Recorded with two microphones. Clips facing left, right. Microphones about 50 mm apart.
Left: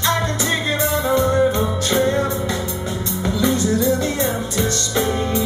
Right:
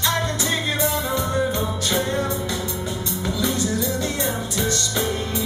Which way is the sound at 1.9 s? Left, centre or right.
Centre.